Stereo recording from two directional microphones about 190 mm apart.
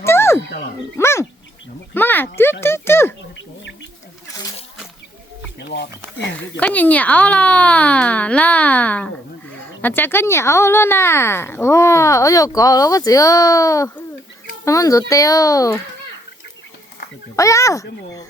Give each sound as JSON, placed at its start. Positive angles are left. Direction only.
{"t": 0.0, "sound": "a sound", "side_deg": 15}
{"t": 0.9, "sound": "gargling", "side_deg": 15}
{"t": 1.9, "sound": "speech", "side_deg": 10}
{"t": 5.5, "sound": "speech", "side_deg": 60}
{"t": 6.6, "sound": "speech", "side_deg": 10}
{"t": 17.3, "sound": "speech", "side_deg": 15}